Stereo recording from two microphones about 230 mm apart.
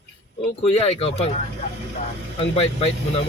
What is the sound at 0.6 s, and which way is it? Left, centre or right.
Speech, left.